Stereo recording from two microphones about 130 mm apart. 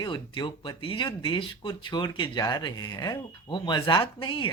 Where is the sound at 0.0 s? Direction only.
40° left (ahead or behind).